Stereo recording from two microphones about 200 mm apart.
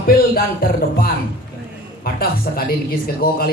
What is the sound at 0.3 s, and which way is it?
Speech, 50° left (ahead or behind).